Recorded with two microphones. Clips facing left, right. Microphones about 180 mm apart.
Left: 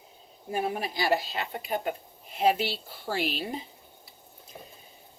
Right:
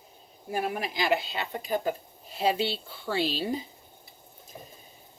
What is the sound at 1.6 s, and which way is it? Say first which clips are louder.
Speech: right 4 dB; 35° right (ahead or behind).